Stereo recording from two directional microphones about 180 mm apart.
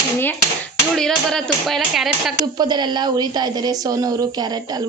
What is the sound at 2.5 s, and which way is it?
Speech, 25° right (ahead or behind).